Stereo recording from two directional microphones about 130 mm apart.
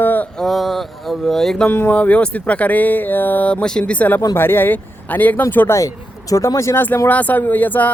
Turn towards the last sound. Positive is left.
turn(degrees=15)  # may be behind; listen again after turning